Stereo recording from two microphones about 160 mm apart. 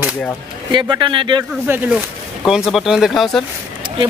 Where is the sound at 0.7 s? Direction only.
30° right (ahead or behind).